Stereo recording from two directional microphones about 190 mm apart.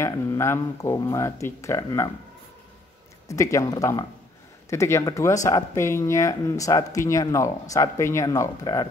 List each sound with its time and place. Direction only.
0.0 s speech: 15° left (ahead or behind)
3.3 s speech: 15° left (ahead or behind)